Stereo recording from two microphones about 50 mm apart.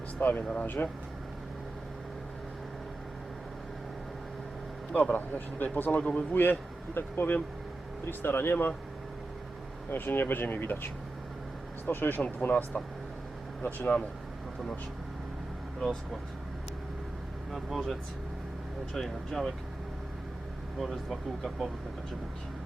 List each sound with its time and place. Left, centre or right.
0.2 s speech: left
4.9 s speech: left
6.3 s speech: left
9.9 s speech: left
11.9 s speech: left
18.9 s speech: centre
21.1 s speech: centre